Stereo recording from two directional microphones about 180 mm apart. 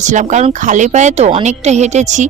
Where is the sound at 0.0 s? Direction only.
45° right (ahead or behind).